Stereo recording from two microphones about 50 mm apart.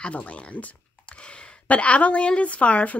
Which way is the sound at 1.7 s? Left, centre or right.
Left.